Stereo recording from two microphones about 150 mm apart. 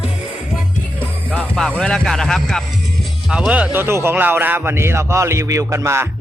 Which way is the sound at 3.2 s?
5° right (ahead or behind).